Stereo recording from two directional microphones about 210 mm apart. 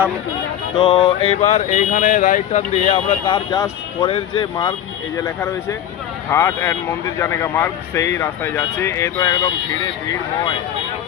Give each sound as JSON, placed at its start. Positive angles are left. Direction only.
{"t": 0.8, "sound": "speech", "side_deg": 25}